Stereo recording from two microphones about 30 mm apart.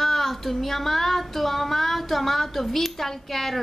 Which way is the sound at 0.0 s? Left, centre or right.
Centre.